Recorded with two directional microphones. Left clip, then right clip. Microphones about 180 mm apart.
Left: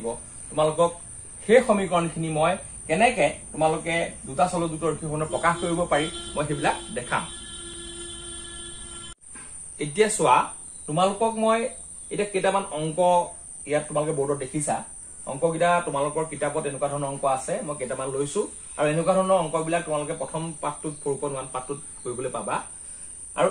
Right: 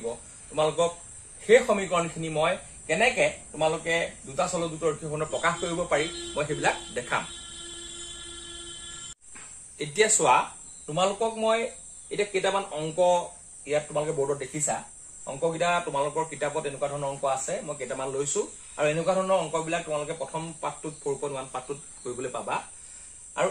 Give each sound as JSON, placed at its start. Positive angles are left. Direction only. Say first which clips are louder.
{"t": 1.7, "sound": "a man's voice", "louder": "left 3 dB", "side_deg": -25}
{"t": 9.8, "sound": "a man's voice", "louder": "left 1 dB", "side_deg": -30}